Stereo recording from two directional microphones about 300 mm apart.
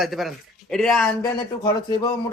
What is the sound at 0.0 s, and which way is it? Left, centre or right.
Speech, centre.